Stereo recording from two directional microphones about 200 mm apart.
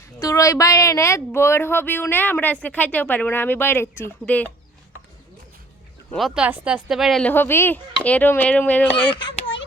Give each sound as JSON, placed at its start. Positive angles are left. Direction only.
{"t": 0.2, "sound": "speech", "side_deg": 15}
{"t": 6.1, "sound": "speech", "side_deg": 0}
{"t": 9.1, "sound": "a sound", "side_deg": 25}